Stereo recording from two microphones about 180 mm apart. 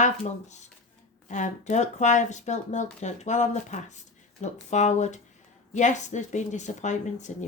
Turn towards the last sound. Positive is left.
turn(degrees=40)  # may be behind; listen again after turning